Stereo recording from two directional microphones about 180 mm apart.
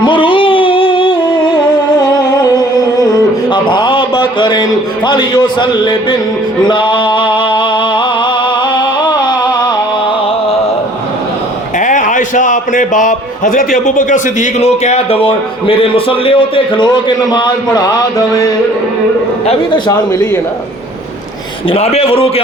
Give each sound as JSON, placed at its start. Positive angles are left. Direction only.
{"t": 0.0, "sound": "music", "side_deg": 30}
{"t": 5.0, "sound": "a man's voice", "side_deg": 25}
{"t": 6.7, "sound": "music", "side_deg": 25}
{"t": 8.8, "sound": "a sound", "side_deg": 25}
{"t": 11.8, "sound": "a man's voice", "side_deg": 45}
{"t": 21.7, "sound": "a man's voice", "side_deg": 35}